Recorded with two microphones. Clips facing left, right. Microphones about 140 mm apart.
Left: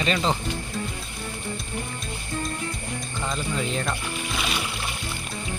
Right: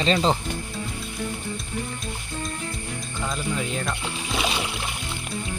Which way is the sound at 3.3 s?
Centre (ahead or behind).